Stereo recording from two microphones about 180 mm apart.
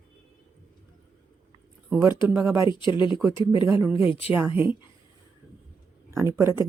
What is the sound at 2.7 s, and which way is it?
Speech, 25° left (ahead or behind).